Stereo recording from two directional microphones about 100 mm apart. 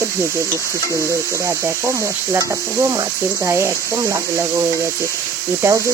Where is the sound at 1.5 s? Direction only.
25° right (ahead or behind).